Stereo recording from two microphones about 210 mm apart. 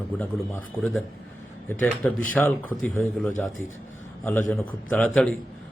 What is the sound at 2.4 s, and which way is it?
Speech, 5° left (ahead or behind).